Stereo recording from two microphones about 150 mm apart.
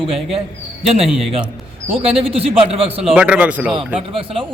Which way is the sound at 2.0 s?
40° right (ahead or behind).